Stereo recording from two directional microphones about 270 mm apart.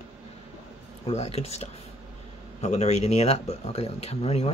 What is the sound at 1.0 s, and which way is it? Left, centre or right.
Speech, left.